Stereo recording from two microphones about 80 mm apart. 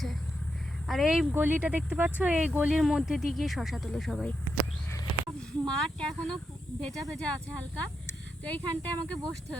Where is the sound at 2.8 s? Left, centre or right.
Centre.